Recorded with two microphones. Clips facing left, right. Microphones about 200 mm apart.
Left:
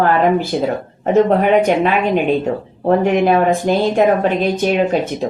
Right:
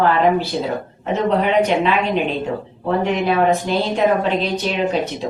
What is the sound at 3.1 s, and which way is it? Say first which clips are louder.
A woman's voice: left 3 dB; 50° left (ahead or behind).